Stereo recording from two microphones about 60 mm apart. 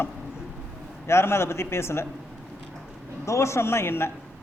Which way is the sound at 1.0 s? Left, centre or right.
Left.